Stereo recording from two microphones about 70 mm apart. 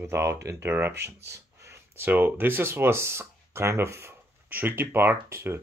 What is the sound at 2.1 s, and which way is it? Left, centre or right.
Speech, right.